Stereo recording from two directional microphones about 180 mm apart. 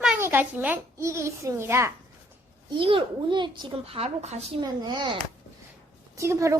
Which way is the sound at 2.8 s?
30° right (ahead or behind).